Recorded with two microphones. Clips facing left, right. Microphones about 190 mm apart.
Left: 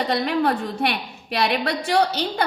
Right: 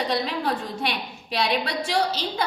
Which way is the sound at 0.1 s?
60° left (ahead or behind).